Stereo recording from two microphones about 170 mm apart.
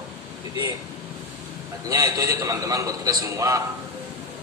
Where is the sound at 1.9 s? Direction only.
20° right (ahead or behind).